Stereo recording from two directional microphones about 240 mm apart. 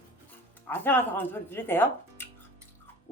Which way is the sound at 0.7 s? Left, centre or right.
Centre.